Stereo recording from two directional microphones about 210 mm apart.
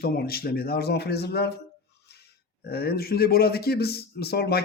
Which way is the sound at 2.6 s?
50° left (ahead or behind).